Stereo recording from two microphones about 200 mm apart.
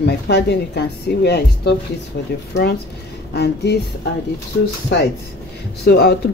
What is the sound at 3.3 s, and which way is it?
Speech, 55° left (ahead or behind).